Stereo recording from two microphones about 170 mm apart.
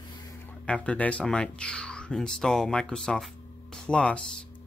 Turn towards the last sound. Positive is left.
turn(degrees=5)  # may be behind; listen again after turning